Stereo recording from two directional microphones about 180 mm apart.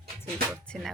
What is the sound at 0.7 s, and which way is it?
Speech, 5° left (ahead or behind).